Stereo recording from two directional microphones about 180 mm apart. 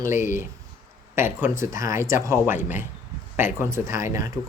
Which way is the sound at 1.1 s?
15° right (ahead or behind).